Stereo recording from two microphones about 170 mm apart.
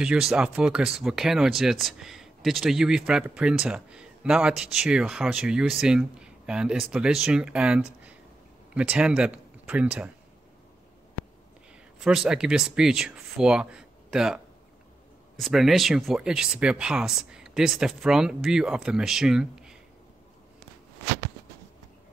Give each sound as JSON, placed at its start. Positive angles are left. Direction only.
{"t": 0.0, "sound": "speech", "side_deg": -5}
{"t": 12.0, "sound": "speech", "side_deg": -5}